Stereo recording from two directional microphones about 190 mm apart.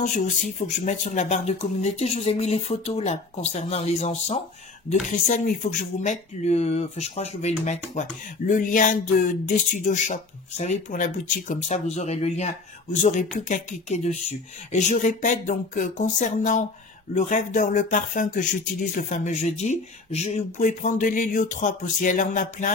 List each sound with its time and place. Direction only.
0.0 s speech: 40° left (ahead or behind)